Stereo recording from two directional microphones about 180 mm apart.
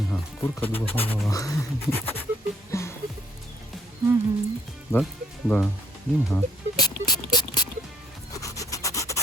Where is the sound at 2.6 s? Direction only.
15° left (ahead or behind).